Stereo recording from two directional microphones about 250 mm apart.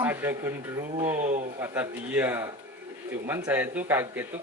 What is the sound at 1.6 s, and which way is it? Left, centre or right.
Speech, centre.